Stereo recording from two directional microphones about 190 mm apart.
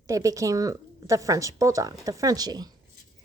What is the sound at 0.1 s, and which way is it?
A woman's voice, 15° right (ahead or behind).